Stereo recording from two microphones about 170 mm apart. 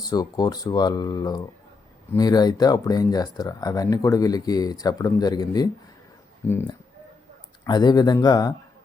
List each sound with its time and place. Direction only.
0.0 s speech: 25° left (ahead or behind)
7.6 s speech: 25° left (ahead or behind)